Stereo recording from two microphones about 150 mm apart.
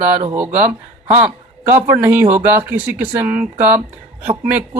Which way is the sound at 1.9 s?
10° right (ahead or behind).